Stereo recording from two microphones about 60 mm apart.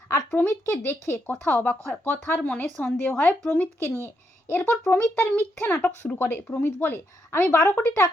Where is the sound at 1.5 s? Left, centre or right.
Left.